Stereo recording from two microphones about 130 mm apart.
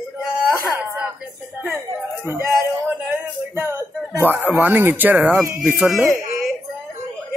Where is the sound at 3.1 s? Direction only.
15° right (ahead or behind).